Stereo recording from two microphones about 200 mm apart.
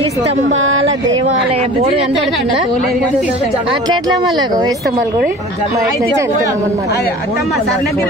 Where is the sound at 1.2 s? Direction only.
30° right (ahead or behind).